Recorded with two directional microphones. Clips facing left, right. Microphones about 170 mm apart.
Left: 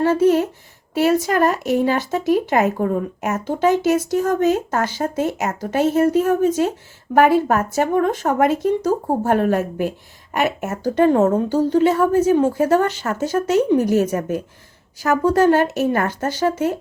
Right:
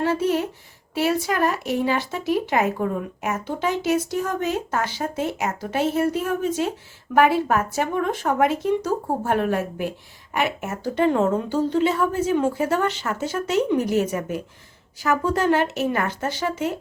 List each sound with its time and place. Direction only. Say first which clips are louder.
0.0 s a woman's voice: left 6 dB; 45° left (ahead or behind)